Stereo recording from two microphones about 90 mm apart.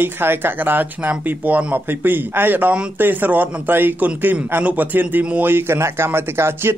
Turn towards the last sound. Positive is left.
turn(degrees=-25)  # may be behind; listen again after turning